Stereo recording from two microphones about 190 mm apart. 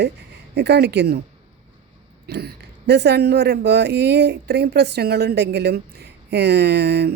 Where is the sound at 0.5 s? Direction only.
60° right (ahead or behind).